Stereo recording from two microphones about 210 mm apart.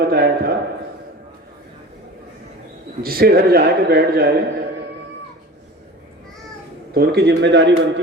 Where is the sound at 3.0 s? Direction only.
45° right (ahead or behind).